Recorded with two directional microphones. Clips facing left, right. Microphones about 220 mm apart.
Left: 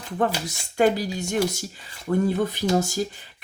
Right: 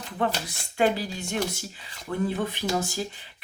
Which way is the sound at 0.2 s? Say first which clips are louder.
Left 3 dB; 45° left (ahead or behind).